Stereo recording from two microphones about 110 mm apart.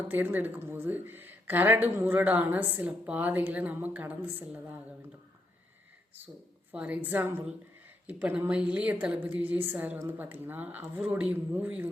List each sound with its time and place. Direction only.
0.1 s speech: 15° right (ahead or behind)
6.7 s speech: 15° right (ahead or behind)